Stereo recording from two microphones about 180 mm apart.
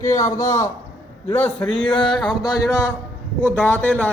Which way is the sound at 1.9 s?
25° left (ahead or behind).